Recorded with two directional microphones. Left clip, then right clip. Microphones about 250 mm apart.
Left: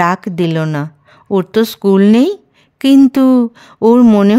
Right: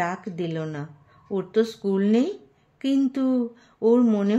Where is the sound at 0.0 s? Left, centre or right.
Left.